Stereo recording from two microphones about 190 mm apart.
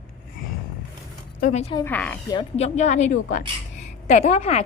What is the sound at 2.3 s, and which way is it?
A woman's voice, 30° left (ahead or behind).